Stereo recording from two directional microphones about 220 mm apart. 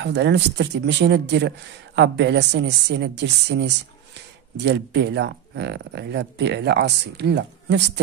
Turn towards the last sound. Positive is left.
turn(degrees=-50)  # may be behind; listen again after turning